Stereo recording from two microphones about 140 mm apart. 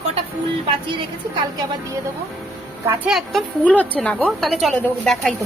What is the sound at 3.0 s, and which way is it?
A woman's voice, centre (ahead or behind).